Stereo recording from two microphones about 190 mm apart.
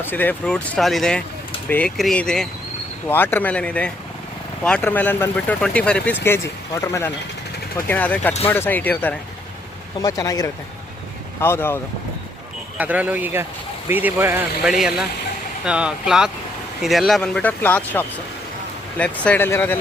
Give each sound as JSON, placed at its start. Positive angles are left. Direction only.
{"t": 0.0, "sound": "speech", "side_deg": 10}
{"t": 12.7, "sound": "speech", "side_deg": -10}